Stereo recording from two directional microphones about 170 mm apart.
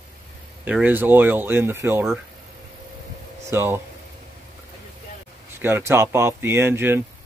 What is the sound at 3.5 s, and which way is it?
Speech, 15° right (ahead or behind).